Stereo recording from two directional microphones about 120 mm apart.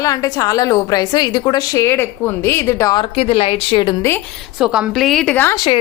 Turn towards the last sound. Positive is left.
turn(degrees=40)  # may be behind; listen again after turning